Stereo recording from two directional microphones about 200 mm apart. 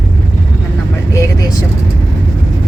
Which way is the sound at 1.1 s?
20° left (ahead or behind).